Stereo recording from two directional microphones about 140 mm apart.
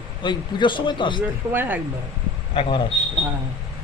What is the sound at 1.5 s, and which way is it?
Speech, 15° right (ahead or behind).